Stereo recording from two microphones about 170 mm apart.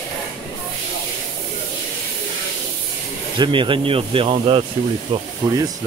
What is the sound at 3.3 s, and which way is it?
Speech, 30° right (ahead or behind).